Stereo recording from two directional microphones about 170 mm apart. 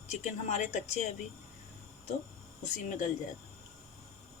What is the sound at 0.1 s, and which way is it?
Speech, 45° left (ahead or behind).